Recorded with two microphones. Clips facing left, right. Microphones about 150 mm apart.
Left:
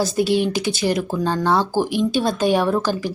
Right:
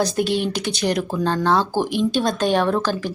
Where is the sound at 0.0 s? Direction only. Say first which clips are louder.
Left 2 dB; 5° left (ahead or behind).